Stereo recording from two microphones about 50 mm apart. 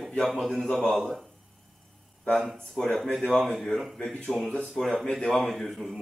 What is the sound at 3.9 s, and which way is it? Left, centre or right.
A man's voice, centre.